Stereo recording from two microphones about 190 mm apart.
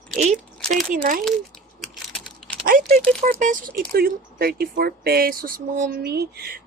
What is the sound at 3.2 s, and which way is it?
Speech, 45° right (ahead or behind).